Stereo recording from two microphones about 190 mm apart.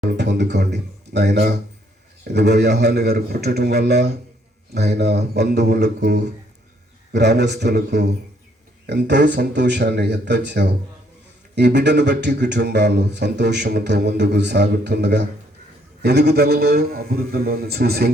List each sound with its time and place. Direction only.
0.2 s speech: 65° right (ahead or behind)